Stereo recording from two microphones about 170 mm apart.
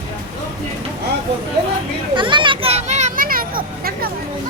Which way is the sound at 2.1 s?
30° right (ahead or behind).